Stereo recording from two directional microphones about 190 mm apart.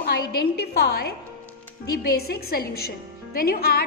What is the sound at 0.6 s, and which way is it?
A woman's voice, 55° left (ahead or behind).